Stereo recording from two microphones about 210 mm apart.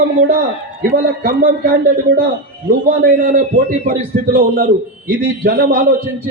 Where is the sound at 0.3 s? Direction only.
45° right (ahead or behind).